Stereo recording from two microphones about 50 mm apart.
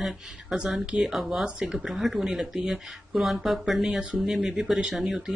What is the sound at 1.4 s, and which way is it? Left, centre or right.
Speech, centre.